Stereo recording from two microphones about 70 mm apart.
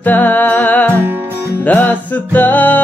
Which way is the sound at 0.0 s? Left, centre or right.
Left.